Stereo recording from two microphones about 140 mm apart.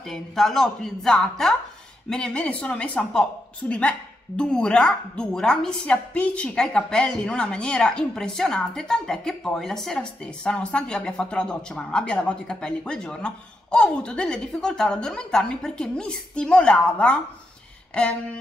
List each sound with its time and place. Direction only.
0.1 s a woman's voice: centre (ahead or behind)